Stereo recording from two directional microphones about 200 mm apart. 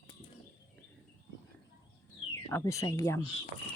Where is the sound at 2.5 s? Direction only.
15° left (ahead or behind).